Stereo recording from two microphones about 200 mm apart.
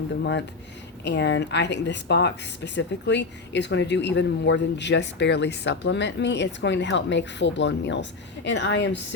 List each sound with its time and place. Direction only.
0.2 s speech: 60° left (ahead or behind)